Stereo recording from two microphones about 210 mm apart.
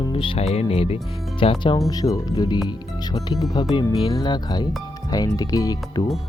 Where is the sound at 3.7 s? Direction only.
20° left (ahead or behind).